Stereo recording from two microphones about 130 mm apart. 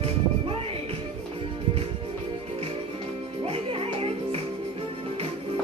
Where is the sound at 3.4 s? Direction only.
45° right (ahead or behind).